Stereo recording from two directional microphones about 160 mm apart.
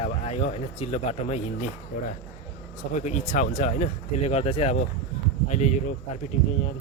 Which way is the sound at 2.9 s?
45° left (ahead or behind).